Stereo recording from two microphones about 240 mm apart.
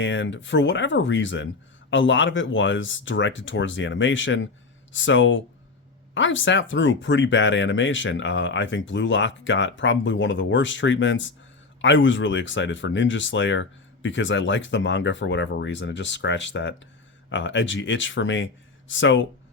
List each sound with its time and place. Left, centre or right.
0.0 s speech: left